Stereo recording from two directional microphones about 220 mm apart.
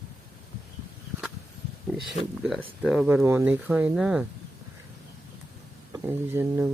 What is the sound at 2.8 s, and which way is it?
Speech, 5° right (ahead or behind).